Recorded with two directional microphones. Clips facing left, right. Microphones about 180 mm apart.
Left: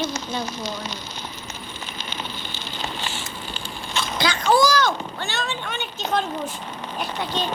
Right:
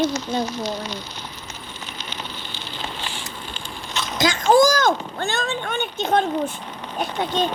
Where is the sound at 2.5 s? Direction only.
45° left (ahead or behind).